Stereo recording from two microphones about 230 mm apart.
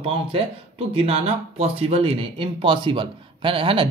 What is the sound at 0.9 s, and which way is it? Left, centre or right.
Speech, right.